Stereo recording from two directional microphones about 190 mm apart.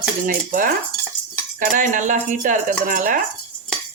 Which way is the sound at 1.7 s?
40° right (ahead or behind).